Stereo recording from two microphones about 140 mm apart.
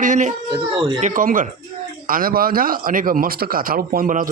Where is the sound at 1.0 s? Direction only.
65° right (ahead or behind).